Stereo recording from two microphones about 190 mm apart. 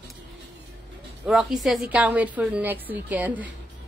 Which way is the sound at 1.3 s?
Centre (ahead or behind).